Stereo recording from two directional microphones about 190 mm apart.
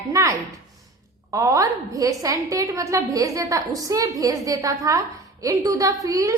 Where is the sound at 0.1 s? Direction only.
15° right (ahead or behind).